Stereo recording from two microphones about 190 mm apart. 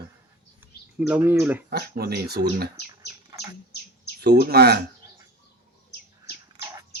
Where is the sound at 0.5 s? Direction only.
10° right (ahead or behind).